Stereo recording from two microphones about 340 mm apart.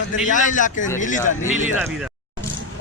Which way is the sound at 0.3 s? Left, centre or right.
Left.